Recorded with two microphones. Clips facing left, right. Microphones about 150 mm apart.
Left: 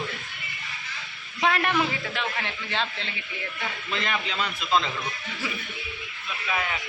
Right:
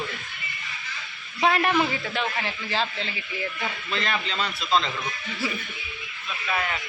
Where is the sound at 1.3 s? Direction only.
Centre (ahead or behind).